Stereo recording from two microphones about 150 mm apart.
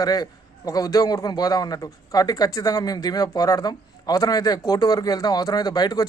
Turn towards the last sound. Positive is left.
turn(degrees=25)  # may be behind; listen again after turning